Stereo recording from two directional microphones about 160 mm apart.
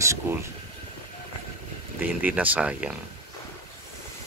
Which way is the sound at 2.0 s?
10° right (ahead or behind).